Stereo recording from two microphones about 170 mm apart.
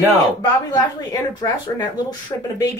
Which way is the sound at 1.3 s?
25° left (ahead or behind).